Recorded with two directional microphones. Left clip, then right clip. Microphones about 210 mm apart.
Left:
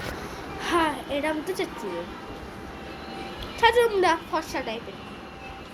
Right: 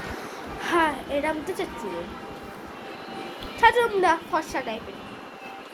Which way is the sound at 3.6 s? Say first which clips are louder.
Right 1 dB; 15° left (ahead or behind).